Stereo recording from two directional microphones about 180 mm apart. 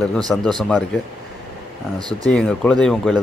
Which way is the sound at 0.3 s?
Centre (ahead or behind).